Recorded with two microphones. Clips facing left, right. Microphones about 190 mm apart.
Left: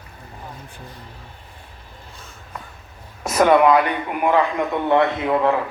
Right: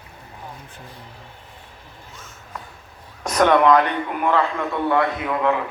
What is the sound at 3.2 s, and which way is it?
A man's voice, 5° left (ahead or behind).